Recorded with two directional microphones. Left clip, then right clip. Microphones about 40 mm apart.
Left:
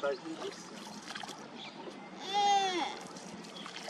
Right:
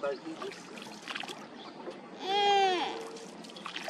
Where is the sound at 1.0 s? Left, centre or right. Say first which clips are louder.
Right 5 dB; right.